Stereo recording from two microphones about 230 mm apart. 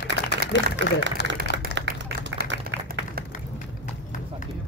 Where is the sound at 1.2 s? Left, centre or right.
Left.